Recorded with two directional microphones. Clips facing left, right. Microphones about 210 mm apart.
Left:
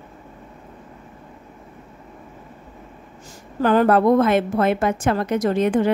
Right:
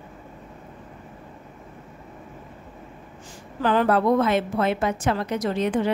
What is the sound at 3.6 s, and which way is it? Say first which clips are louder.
A woman's voice: left 4 dB; 50° left (ahead or behind).